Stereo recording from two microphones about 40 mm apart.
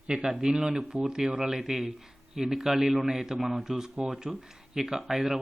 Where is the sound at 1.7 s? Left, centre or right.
Centre.